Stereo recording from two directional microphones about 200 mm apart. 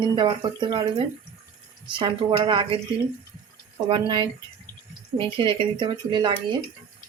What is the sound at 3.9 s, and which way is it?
Speech, 25° right (ahead or behind).